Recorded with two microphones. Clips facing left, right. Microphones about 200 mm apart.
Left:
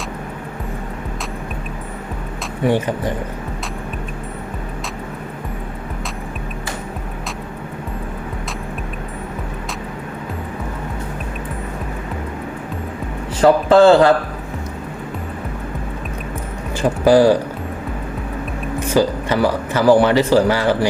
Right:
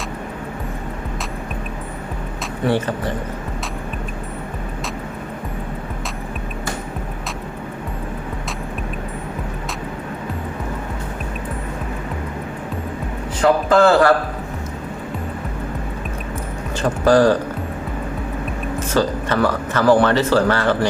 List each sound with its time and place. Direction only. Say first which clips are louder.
2.6 s speech: left 2 dB; 15° left (ahead or behind)
13.4 s a man's voice: left 4 dB; 30° left (ahead or behind)
16.8 s speech: left 2 dB; 10° left (ahead or behind)
18.9 s speech: left 3 dB; 10° left (ahead or behind)